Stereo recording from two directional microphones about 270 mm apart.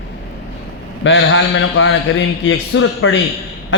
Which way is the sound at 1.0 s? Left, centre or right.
Left.